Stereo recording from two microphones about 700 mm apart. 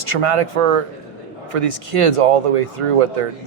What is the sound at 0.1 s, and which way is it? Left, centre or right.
Speech, right.